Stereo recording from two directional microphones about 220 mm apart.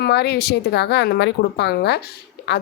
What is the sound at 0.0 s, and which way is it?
Speech, 45° left (ahead or behind).